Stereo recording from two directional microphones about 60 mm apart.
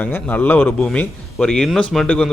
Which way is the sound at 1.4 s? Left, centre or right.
Centre.